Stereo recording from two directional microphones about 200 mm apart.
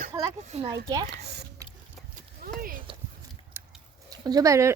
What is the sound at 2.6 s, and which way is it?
Speech, 45° right (ahead or behind).